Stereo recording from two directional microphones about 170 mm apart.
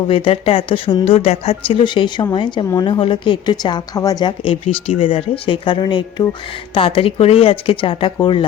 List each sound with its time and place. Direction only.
0.1 s a woman's voice: 35° left (ahead or behind)